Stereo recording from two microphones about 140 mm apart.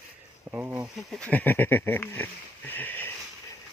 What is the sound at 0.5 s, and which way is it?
Speech, 15° right (ahead or behind).